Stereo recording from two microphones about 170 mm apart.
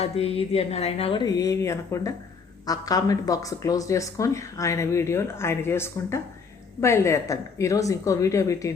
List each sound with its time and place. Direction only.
0.0 s speech: 35° left (ahead or behind); by 8.7 s 20° left (ahead or behind)